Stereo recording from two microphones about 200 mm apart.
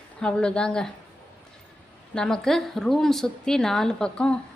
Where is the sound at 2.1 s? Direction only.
5° left (ahead or behind).